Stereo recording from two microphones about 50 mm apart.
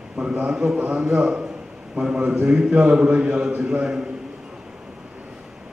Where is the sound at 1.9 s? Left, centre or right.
Right.